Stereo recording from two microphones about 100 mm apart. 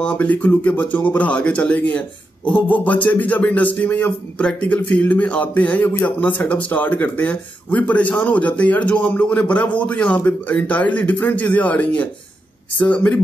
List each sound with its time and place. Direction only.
0.0 s speech: 15° left (ahead or behind)